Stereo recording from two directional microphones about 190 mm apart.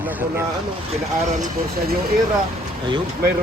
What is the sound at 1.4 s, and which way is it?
Speech, 55° right (ahead or behind).